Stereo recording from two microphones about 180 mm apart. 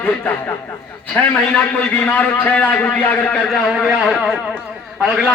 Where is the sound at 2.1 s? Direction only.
10° left (ahead or behind).